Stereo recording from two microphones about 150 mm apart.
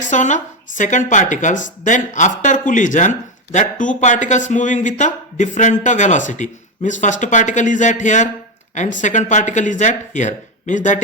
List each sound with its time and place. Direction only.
0.1 s speech: 55° left (ahead or behind)